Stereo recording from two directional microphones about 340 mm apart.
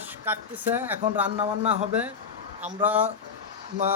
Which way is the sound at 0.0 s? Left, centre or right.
Centre.